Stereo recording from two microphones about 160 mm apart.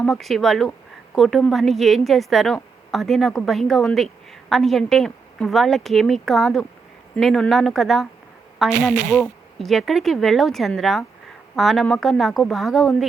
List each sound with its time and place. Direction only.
0.0 s a woman's voice: centre (ahead or behind)